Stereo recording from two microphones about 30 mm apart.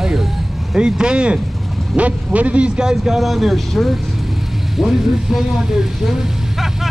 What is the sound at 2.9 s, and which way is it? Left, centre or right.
Speech, centre.